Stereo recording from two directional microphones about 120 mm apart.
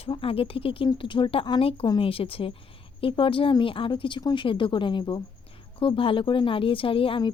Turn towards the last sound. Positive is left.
turn(degrees=50)  # may be behind; listen again after turning